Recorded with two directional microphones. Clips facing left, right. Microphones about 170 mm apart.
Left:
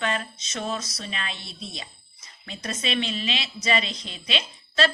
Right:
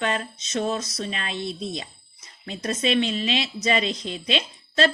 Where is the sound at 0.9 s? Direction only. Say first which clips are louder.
Right 4 dB; 45° right (ahead or behind).